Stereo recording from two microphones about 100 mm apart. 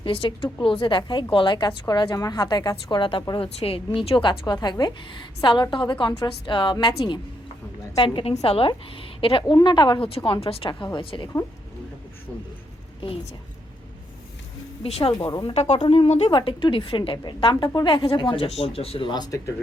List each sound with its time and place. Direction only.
0.0 s a woman's voice: 60° left (ahead or behind)
7.9 s a woman's voice: 60° left (ahead or behind)
9.6 s a woman's voice: 50° left (ahead or behind); by 10.7 s 70° left (ahead or behind)
10.9 s a woman's voice: 55° left (ahead or behind)
14.8 s a woman's voice: 85° left; by 18.4 s 60° left (ahead or behind)
18.4 s a woman's voice: 85° left; by 19.5 s 40° left (ahead or behind)